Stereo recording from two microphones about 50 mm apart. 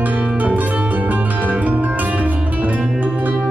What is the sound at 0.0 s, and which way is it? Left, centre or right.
Harp, right.